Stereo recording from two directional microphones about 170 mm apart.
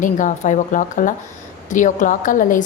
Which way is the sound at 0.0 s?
50° left (ahead or behind).